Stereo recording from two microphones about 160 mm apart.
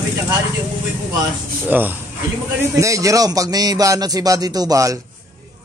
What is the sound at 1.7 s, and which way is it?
A man's voice, 10° right (ahead or behind).